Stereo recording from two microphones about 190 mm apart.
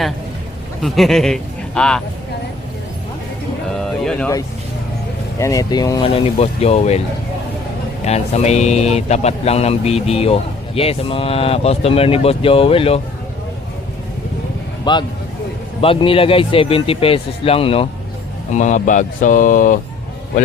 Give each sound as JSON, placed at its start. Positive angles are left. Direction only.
{"t": 0.8, "sound": "a man's voice", "side_deg": 0}
{"t": 3.8, "sound": "a sound", "side_deg": 0}
{"t": 5.4, "sound": "speech", "side_deg": 15}
{"t": 8.0, "sound": "speech", "side_deg": 35}
{"t": 14.9, "sound": "speech", "side_deg": 20}